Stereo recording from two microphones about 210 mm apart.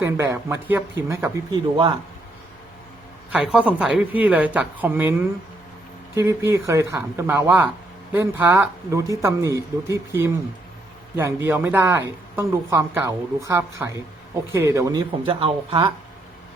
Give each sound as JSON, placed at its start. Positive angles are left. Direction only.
{"t": 0.0, "sound": "a woman's voice", "side_deg": -10}
{"t": 3.3, "sound": "a woman's voice", "side_deg": -5}
{"t": 6.1, "sound": "a woman's voice", "side_deg": -15}